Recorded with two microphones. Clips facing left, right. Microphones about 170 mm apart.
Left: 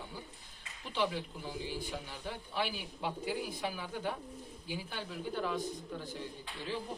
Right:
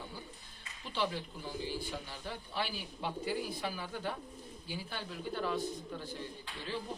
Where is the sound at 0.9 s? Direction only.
10° left (ahead or behind).